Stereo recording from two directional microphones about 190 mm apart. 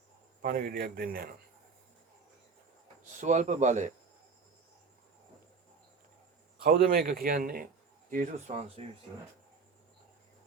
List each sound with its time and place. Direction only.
0.4 s a man's voice: 55° right (ahead or behind)
3.2 s speech: 40° right (ahead or behind)
6.6 s a man's voice: 50° right (ahead or behind); by 8.8 s 35° right (ahead or behind)